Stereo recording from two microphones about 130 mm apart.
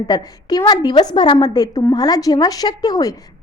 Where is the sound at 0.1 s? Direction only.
30° left (ahead or behind).